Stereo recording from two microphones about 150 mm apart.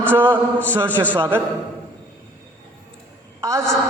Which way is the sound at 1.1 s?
15° right (ahead or behind).